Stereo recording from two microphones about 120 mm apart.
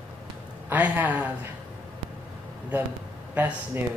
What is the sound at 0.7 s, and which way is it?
Speech, 15° right (ahead or behind).